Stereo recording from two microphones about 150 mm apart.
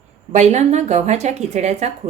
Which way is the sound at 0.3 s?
50° right (ahead or behind).